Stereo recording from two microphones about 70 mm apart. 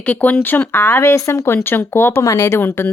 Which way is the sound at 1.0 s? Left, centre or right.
Left.